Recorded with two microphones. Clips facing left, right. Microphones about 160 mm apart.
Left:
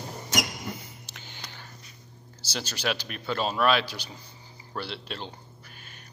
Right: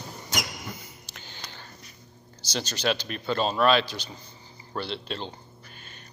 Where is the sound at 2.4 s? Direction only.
10° left (ahead or behind).